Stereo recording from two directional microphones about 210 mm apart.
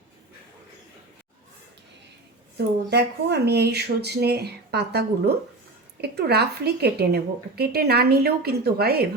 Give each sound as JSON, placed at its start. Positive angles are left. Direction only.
{"t": 2.6, "sound": "a woman's voice", "side_deg": -50}